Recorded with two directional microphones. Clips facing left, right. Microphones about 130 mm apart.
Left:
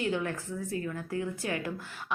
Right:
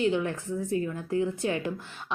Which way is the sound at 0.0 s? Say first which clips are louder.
Right 5 dB; 20° right (ahead or behind).